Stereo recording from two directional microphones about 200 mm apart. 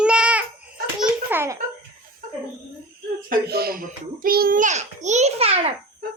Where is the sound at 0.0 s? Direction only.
5° right (ahead or behind).